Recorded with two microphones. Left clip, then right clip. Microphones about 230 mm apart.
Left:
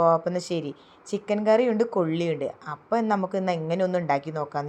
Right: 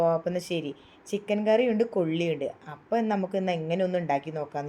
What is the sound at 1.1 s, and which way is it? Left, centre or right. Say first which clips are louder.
Speech: left 1 dB; left.